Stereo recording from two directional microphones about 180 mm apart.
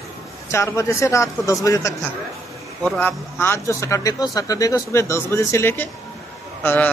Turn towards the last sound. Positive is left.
turn(degrees=10)  # may be behind; listen again after turning